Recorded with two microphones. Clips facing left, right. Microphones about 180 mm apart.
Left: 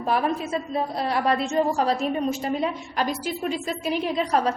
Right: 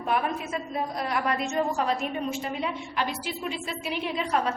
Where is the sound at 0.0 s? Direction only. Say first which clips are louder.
Left 4 dB; 35° left (ahead or behind).